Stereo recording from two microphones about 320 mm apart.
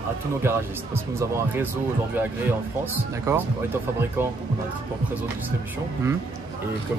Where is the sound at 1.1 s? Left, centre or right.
Centre.